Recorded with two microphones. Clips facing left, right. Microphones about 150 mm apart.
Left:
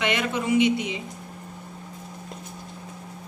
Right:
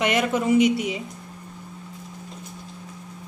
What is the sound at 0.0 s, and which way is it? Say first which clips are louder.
Speech: right 4 dB; 40° right (ahead or behind).